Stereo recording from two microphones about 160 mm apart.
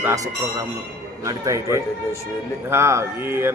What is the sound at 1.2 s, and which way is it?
Speech, 20° right (ahead or behind).